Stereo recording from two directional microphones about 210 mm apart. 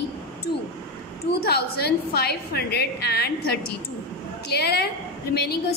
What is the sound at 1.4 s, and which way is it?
A woman's voice, 50° left (ahead or behind).